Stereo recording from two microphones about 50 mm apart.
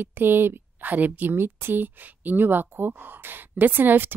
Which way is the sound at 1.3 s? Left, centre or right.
Right.